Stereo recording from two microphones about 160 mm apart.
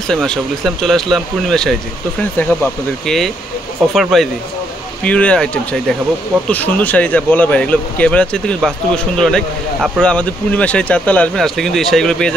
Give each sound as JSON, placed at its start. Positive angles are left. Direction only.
{"t": 0.1, "sound": "speech", "side_deg": 0}